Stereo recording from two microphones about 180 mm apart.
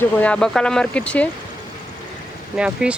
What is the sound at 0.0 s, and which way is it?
Speech, 5° left (ahead or behind).